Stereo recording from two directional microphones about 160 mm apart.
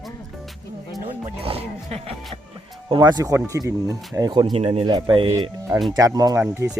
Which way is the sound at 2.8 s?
30° right (ahead or behind).